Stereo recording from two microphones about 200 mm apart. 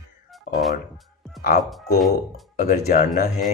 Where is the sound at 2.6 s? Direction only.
45° left (ahead or behind).